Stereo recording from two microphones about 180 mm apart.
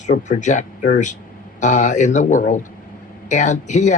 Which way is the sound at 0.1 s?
40° left (ahead or behind).